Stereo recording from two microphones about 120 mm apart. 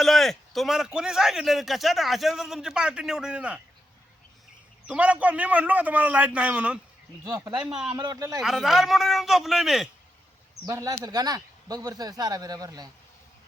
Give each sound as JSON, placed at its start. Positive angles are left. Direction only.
{"t": 0.0, "sound": "a man's voice", "side_deg": 0}
{"t": 4.9, "sound": "a man's voice", "side_deg": -10}
{"t": 7.3, "sound": "speech", "side_deg": -30}
{"t": 7.6, "sound": "a man's voice", "side_deg": -5}
{"t": 7.9, "sound": "speech", "side_deg": -30}
{"t": 8.4, "sound": "a man's voice", "side_deg": 0}
{"t": 10.7, "sound": "speech", "side_deg": -25}